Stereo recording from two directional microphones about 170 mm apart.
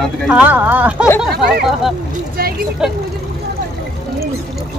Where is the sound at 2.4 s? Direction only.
60° right (ahead or behind).